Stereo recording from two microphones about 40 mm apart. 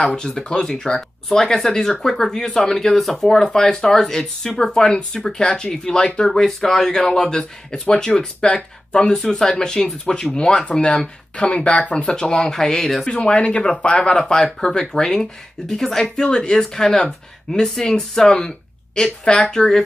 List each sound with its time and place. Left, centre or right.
0.0 s speech: centre
3.5 s speech: centre
9.0 s speech: centre
12.5 s speech: centre
13.1 s speech: left